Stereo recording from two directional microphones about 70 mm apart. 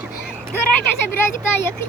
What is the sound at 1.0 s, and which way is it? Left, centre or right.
Speech, left.